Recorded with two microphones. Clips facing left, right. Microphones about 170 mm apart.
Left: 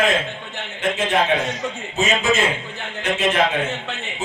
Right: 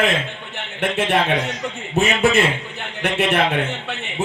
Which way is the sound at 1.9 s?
60° right (ahead or behind).